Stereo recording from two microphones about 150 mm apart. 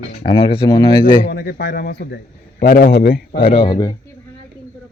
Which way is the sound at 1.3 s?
85° left.